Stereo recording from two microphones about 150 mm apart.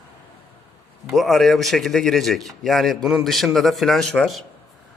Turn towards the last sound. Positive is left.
turn(degrees=0)  # may be behind; listen again after turning